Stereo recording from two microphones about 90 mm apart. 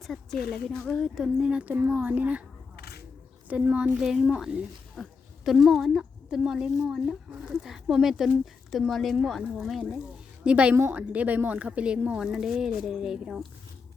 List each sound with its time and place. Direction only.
0.0 s a woman's voice: 5° left (ahead or behind); by 2.4 s 15° right (ahead or behind)
3.5 s a woman's voice: 15° right (ahead or behind)
4.0 s a woman's voice: 10° right (ahead or behind)
5.0 s speech: 5° left (ahead or behind)
10.4 s a woman's voice: 15° right (ahead or behind)